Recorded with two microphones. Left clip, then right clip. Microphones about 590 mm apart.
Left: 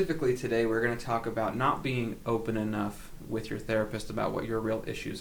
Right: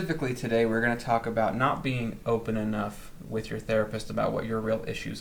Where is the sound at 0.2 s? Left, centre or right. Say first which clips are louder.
Right 1 dB; left.